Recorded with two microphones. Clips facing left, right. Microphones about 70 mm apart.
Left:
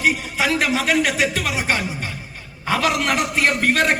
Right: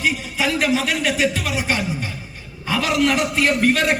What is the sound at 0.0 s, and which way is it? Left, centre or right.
A man's voice, left.